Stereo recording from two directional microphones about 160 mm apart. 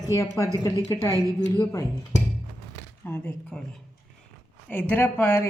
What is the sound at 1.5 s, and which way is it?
Speech, 15° left (ahead or behind).